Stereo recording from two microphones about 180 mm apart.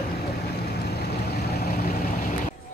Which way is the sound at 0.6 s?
60° left (ahead or behind).